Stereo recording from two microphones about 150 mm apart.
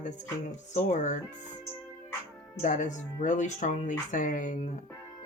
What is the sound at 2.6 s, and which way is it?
Speech, 55° left (ahead or behind).